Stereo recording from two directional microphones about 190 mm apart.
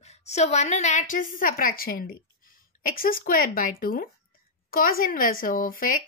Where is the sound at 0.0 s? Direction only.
35° left (ahead or behind).